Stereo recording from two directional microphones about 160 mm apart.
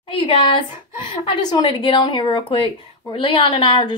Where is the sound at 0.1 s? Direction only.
30° left (ahead or behind).